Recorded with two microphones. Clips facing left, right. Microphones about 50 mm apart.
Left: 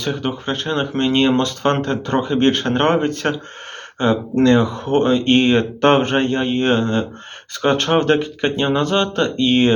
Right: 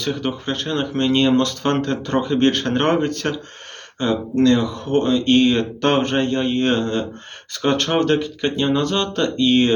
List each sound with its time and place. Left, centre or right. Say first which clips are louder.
0.0 s speech: left 1 dB; centre